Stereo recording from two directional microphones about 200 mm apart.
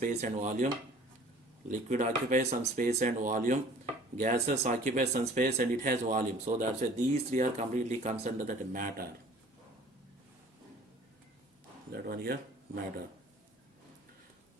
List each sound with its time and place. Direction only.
0.0 s speech: 35° right (ahead or behind)
1.7 s speech: 40° right (ahead or behind)
11.9 s speech: 50° right (ahead or behind)